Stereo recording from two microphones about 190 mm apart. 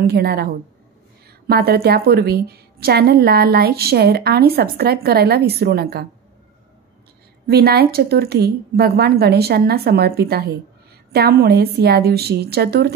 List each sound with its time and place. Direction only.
0.0 s a woman's voice: 55° right (ahead or behind)
1.5 s a woman's voice: 55° right (ahead or behind)
7.4 s a woman's voice: 55° right (ahead or behind)